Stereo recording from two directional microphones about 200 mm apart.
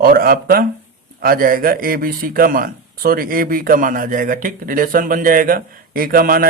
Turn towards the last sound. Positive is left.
turn(degrees=-45)  # may be behind; listen again after turning